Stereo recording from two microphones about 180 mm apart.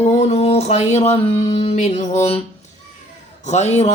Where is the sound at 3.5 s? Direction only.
40° left (ahead or behind).